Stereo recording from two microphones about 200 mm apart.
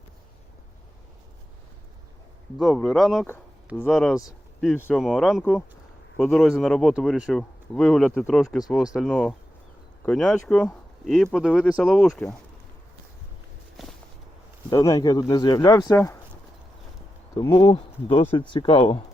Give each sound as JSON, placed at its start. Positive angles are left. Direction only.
{"t": 2.6, "sound": "speech", "side_deg": 0}
{"t": 5.0, "sound": "speech", "side_deg": 0}
{"t": 13.8, "sound": "a sound", "side_deg": 0}
{"t": 14.7, "sound": "speech", "side_deg": 20}
{"t": 17.3, "sound": "speech", "side_deg": 25}